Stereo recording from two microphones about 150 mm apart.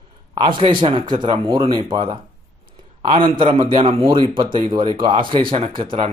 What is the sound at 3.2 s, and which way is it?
Speech, 35° right (ahead or behind).